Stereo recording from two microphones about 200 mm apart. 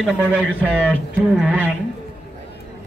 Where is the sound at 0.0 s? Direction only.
10° right (ahead or behind).